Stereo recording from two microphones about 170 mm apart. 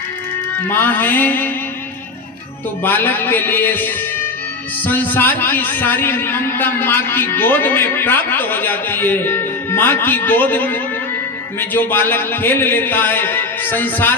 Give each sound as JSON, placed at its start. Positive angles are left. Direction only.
{"t": 0.7, "sound": "a man's voice", "side_deg": 10}
{"t": 2.8, "sound": "a man's voice", "side_deg": 10}